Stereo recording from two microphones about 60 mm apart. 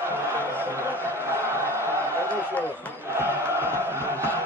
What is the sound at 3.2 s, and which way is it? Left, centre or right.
Chant, right.